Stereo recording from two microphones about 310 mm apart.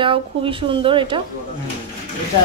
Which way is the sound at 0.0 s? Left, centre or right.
Centre.